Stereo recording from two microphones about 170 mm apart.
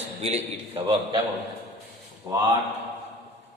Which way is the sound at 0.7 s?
25° right (ahead or behind).